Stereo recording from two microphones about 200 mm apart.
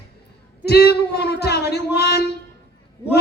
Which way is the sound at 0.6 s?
55° left (ahead or behind).